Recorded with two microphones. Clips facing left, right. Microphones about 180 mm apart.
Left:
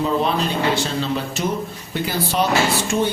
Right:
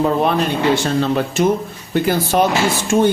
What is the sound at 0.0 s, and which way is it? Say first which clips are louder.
Speech: right 4 dB; 55° right (ahead or behind).